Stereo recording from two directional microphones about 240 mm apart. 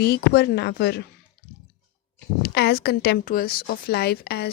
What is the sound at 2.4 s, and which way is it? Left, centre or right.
A woman's voice, left.